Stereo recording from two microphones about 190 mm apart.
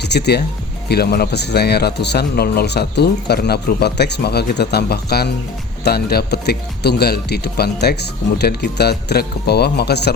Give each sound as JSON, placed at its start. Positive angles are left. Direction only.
{"t": 0.0, "sound": "speech", "side_deg": 60}